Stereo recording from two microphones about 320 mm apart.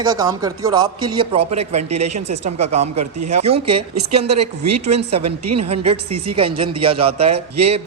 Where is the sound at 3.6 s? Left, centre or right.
Right.